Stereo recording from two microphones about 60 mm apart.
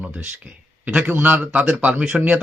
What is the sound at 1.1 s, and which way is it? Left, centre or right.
Speech, right.